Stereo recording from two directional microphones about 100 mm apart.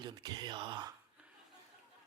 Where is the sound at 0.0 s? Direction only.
45° right (ahead or behind).